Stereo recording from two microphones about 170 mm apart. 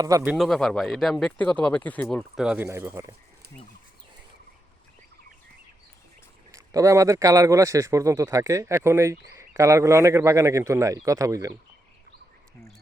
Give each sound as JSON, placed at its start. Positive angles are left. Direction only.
{"t": 0.0, "sound": "speech", "side_deg": -20}
{"t": 0.3, "sound": "speech", "side_deg": 0}
{"t": 2.6, "sound": "a man's voice", "side_deg": -15}
{"t": 6.5, "sound": "a man's voice", "side_deg": -20}